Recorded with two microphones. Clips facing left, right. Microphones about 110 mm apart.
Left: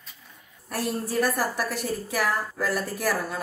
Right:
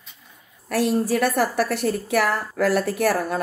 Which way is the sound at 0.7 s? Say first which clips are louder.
Right 8 dB; 85° right.